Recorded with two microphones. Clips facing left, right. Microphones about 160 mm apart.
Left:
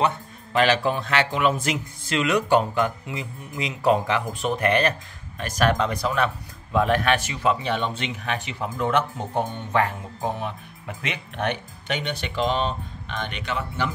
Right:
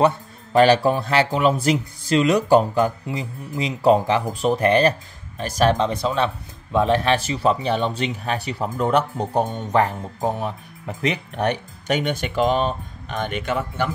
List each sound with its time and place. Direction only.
0.0 s a man's voice: 35° right (ahead or behind)